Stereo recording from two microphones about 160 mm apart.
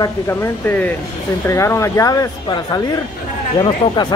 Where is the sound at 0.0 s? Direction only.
15° left (ahead or behind).